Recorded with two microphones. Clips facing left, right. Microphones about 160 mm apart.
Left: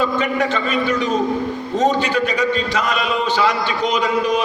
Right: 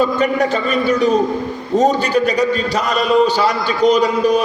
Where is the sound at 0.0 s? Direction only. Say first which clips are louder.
Right 4 dB; 40° right (ahead or behind).